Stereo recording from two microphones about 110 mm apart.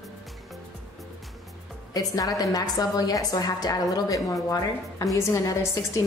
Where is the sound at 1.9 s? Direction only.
35° left (ahead or behind).